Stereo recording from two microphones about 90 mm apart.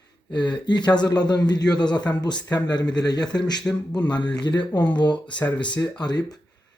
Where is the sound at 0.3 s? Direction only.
55° left (ahead or behind).